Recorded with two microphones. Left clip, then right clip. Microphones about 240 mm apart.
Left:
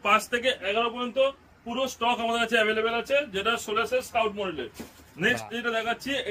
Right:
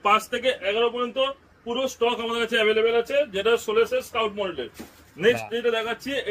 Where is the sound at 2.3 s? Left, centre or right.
Left.